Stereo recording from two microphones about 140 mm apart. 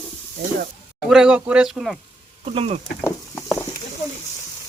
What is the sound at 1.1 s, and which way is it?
Speech, 5° right (ahead or behind).